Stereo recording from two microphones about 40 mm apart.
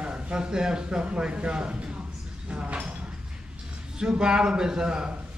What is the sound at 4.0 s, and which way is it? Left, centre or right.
A man's voice, centre.